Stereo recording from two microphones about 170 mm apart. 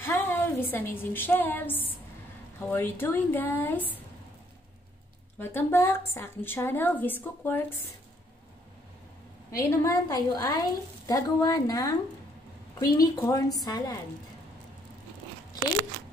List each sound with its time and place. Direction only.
0.0 s a woman's voice: 10° left (ahead or behind)
5.4 s a woman's voice: 15° left (ahead or behind)
9.5 s a woman's voice: 15° left (ahead or behind)